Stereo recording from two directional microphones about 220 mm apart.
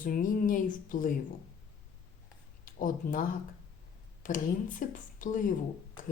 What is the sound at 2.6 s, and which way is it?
Speech, 40° left (ahead or behind).